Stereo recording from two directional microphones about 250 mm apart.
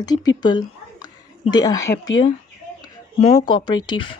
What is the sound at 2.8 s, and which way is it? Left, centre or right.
Speech, centre.